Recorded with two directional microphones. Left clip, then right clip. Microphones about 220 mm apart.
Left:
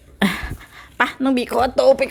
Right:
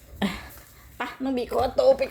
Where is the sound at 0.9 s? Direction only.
40° left (ahead or behind).